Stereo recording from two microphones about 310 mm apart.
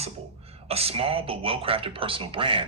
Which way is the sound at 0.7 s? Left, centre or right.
Centre.